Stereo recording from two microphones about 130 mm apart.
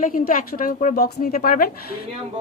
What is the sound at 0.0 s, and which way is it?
Speech, 90° left.